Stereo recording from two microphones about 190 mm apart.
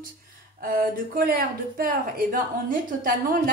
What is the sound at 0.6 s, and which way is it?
Speech, 50° right (ahead or behind).